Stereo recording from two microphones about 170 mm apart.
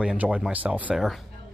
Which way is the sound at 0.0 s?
5° right (ahead or behind).